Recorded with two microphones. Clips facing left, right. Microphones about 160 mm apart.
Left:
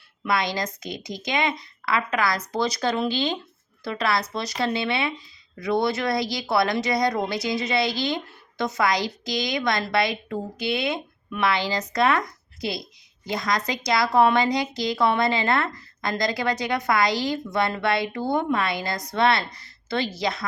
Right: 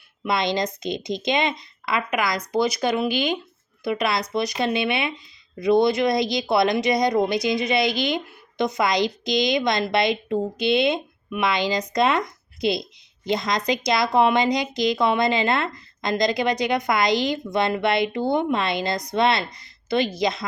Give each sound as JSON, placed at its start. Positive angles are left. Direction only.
{"t": 0.3, "sound": "speech", "side_deg": -20}